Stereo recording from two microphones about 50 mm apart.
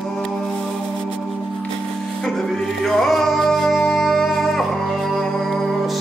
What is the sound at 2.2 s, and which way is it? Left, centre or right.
Music, centre.